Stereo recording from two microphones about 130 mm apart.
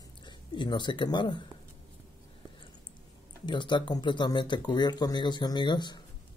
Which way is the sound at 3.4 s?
35° left (ahead or behind).